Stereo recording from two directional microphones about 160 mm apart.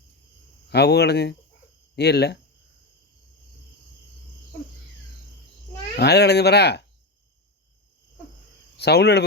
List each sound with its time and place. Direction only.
0.7 s speech: 90° left
6.0 s speech: 90° left
8.8 s speech: 90° left